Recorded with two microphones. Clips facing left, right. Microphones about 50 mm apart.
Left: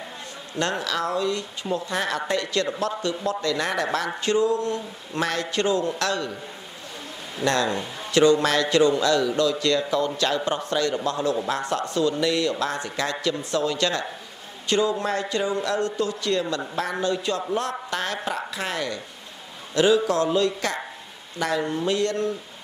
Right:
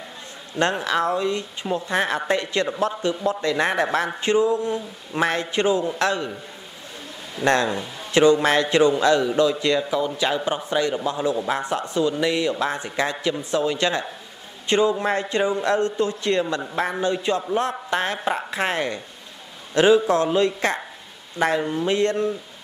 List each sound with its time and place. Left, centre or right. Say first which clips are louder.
0.6 s a man's voice: right 4 dB; right
7.4 s a man's voice: right 3 dB; right